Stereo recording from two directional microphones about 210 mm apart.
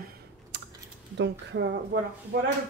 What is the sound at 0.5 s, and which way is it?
Typing, 60° right (ahead or behind).